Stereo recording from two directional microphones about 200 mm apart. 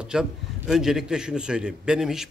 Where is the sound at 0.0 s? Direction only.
5° right (ahead or behind).